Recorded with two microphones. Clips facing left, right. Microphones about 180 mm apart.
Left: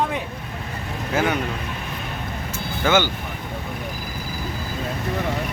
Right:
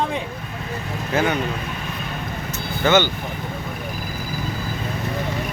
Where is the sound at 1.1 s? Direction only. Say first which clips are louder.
Right 1 dB; 10° left (ahead or behind).